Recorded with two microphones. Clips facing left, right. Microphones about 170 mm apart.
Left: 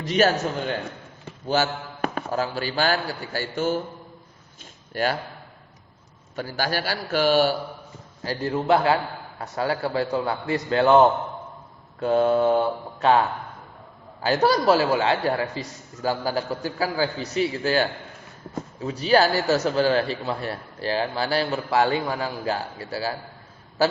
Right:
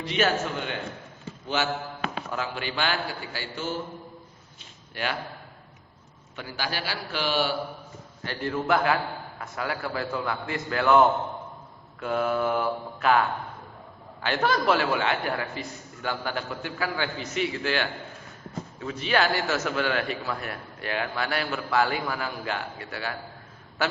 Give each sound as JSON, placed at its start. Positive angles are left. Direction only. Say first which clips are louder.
{"t": 0.0, "sound": "a man's voice", "louder": "left 5 dB", "side_deg": 40}
{"t": 4.9, "sound": "a man's voice", "louder": "left 7 dB", "side_deg": 40}
{"t": 6.3, "sound": "a man's voice", "louder": "left 6 dB", "side_deg": 40}
{"t": 8.2, "sound": "a man's voice", "louder": "left 4 dB", "side_deg": 35}
{"t": 8.5, "sound": "mantra", "louder": "left 4 dB", "side_deg": 30}
{"t": 9.4, "sound": "a man's voice", "louder": "left 7 dB", "side_deg": 30}
{"t": 11.9, "sound": "mantra", "louder": "left 7 dB", "side_deg": 30}
{"t": 14.2, "sound": "a man's voice", "louder": "left 5 dB", "side_deg": 35}